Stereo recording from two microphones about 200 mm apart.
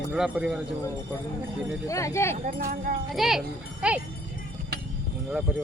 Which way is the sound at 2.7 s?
45° right (ahead or behind).